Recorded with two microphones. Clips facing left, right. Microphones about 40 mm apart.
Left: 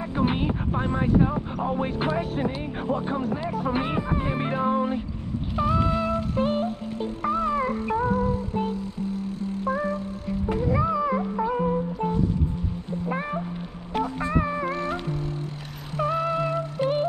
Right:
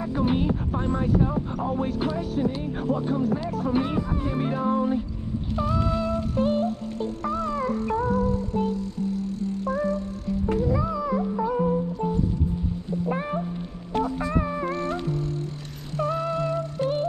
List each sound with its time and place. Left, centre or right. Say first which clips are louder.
0.2 s speech: even; left
5.6 s music: left 3 dB; centre
10.6 s music: left 2 dB; left
13.0 s cat: right 1 dB; centre
14.6 s music: even; centre